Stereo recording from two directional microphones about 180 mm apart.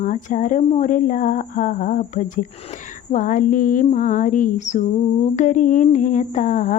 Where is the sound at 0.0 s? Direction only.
45° left (ahead or behind).